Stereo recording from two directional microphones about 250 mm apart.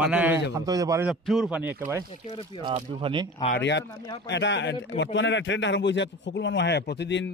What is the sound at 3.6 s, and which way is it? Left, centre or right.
A man's voice, left.